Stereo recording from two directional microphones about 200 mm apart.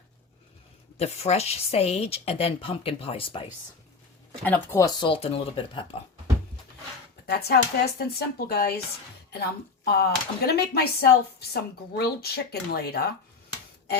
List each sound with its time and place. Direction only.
0.9 s speech: 30° left (ahead or behind)
4.4 s speech: 10° left (ahead or behind); by 6.0 s 25° left (ahead or behind)
7.3 s speech: 55° left (ahead or behind)
9.8 s speech: 50° left (ahead or behind)